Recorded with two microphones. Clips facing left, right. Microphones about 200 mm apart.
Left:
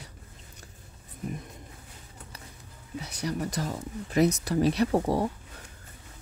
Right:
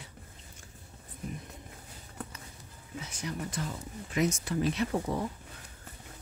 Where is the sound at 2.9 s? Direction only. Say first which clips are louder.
Left 6 dB; 35° left (ahead or behind).